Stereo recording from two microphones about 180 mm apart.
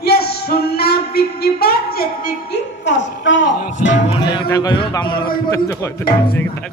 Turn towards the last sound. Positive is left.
turn(degrees=10)  # may be behind; listen again after turning